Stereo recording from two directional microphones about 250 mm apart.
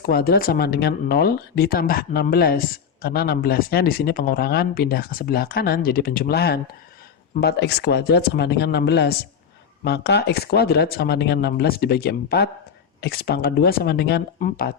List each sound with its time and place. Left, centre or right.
0.0 s speech: left